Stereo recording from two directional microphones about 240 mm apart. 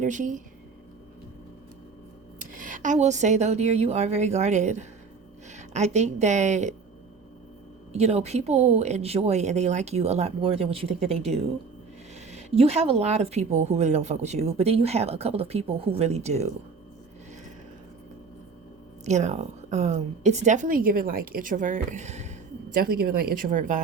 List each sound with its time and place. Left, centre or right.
0.0 s a woman's voice: right
2.6 s a woman's voice: right
7.9 s speech: right
19.0 s a woman's voice: right